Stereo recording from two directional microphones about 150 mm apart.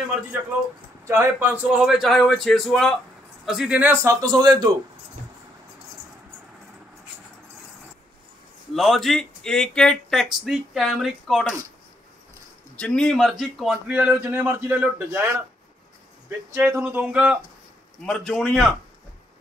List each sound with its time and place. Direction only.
1.0 s a man's voice: 15° right (ahead or behind)
8.7 s speech: centre (ahead or behind)
12.7 s speech: 5° left (ahead or behind); by 15.2 s 10° right (ahead or behind)
16.5 s speech: 10° right (ahead or behind)
18.0 s speech: 5° left (ahead or behind)